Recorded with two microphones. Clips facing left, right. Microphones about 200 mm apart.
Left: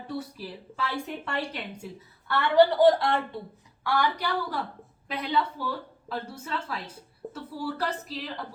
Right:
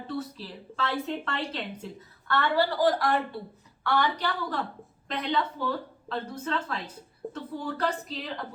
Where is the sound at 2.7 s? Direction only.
25° left (ahead or behind).